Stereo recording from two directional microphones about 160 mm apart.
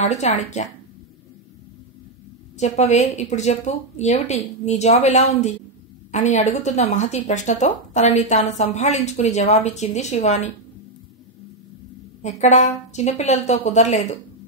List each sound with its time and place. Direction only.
0.0 s speech: 45° left (ahead or behind)
2.5 s speech: 45° left (ahead or behind)
12.2 s speech: 45° left (ahead or behind)